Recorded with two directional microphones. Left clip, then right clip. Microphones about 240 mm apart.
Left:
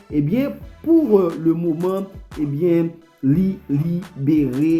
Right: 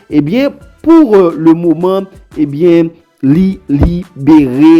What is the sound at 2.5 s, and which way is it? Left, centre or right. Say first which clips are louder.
Speech: right 10 dB; right.